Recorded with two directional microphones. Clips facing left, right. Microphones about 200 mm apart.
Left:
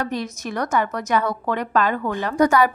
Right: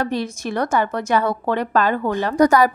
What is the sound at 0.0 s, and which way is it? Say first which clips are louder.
A woman's voice: right 3 dB; 30° right (ahead or behind).